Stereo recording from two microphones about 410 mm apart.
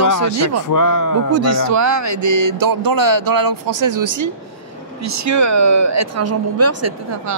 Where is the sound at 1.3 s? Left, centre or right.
Right.